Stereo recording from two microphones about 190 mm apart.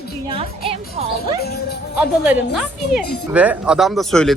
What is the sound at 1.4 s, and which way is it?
Speech, 55° left (ahead or behind).